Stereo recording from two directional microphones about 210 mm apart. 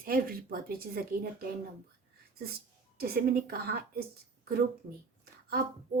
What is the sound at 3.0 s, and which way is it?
Speech, 45° right (ahead or behind).